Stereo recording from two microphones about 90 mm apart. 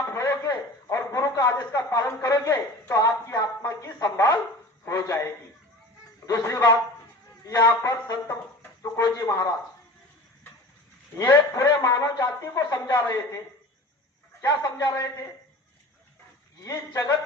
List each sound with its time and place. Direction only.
0.1 s a sound: 30° left (ahead or behind)
4.9 s a man's voice: 35° left (ahead or behind)
11.1 s a man's voice: 30° left (ahead or behind)
14.4 s a man's voice: 40° left (ahead or behind)
16.6 s a man's voice: 40° left (ahead or behind)